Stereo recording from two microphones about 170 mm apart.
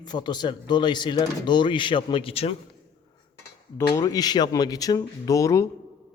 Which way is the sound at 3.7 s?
25° left (ahead or behind).